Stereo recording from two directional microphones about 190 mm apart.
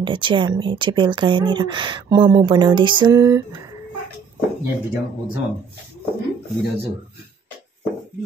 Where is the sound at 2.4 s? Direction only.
25° right (ahead or behind).